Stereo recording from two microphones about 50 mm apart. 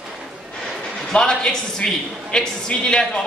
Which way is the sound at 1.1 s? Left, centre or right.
Centre.